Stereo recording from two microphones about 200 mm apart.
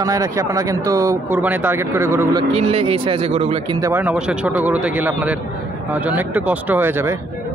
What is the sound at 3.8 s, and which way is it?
Speech, 10° right (ahead or behind).